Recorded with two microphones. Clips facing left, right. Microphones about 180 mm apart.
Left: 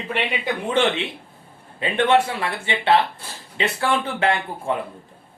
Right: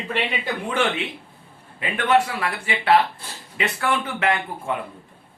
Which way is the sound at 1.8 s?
30° left (ahead or behind).